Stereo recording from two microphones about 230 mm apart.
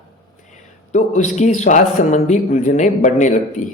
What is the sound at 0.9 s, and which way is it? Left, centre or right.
A man's voice, left.